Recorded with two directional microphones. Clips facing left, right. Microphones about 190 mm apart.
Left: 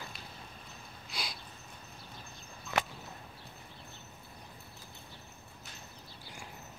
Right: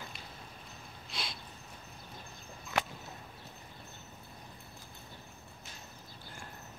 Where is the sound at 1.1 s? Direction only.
Centre (ahead or behind).